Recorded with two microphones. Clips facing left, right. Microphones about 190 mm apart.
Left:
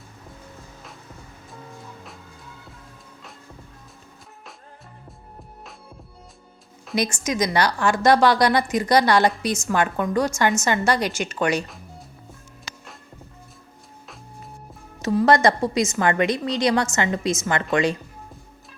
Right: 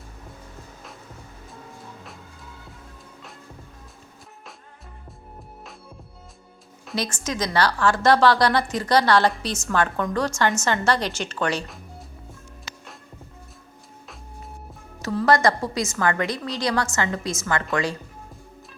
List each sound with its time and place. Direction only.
6.9 s a woman's voice: 15° left (ahead or behind)
15.0 s a woman's voice: 20° left (ahead or behind)